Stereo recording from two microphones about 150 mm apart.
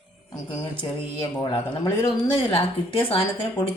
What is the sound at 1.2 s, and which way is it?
A woman's voice, 35° left (ahead or behind).